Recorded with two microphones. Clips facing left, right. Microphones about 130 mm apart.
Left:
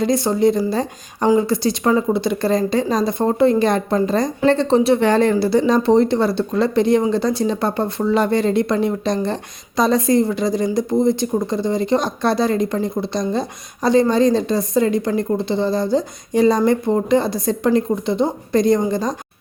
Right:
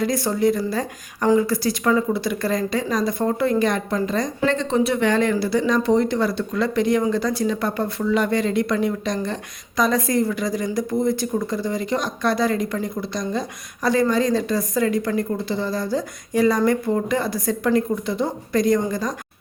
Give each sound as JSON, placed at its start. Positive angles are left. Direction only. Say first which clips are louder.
{"t": 0.0, "sound": "speech", "louder": "left 4 dB", "side_deg": 25}